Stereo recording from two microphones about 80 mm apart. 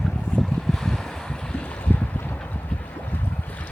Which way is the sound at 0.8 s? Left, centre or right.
Centre.